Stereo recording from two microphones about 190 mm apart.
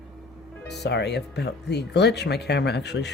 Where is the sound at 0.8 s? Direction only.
60° left (ahead or behind).